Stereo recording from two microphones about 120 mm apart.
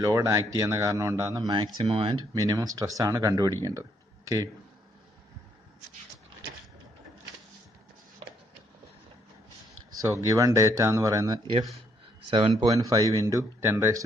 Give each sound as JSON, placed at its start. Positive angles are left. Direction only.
{"t": 0.0, "sound": "speech", "side_deg": -30}
{"t": 1.5, "sound": "speech", "side_deg": -45}
{"t": 2.3, "sound": "speech", "side_deg": -30}
{"t": 9.9, "sound": "speech", "side_deg": -25}
{"t": 12.3, "sound": "speech", "side_deg": -50}
{"t": 12.8, "sound": "speech", "side_deg": -30}